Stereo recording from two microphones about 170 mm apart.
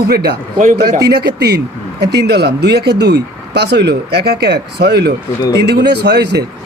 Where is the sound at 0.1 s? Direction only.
65° right (ahead or behind).